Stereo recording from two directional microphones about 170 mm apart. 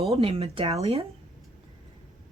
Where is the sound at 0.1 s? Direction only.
35° right (ahead or behind).